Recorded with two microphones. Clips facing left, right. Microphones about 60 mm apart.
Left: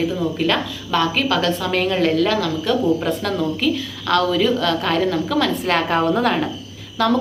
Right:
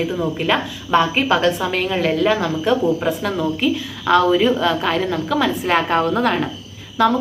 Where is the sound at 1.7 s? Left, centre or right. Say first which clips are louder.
Left 1 dB; centre.